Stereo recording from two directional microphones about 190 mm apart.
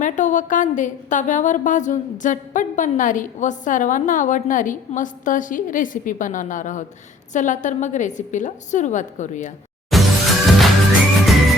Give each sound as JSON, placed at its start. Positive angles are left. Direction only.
{"t": 0.0, "sound": "a woman's voice", "side_deg": 40}
{"t": 9.9, "sound": "music", "side_deg": 0}